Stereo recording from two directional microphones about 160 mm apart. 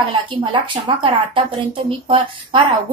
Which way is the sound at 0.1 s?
30° right (ahead or behind).